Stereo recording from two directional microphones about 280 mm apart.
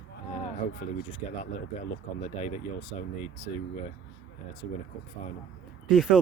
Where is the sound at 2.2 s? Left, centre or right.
Left.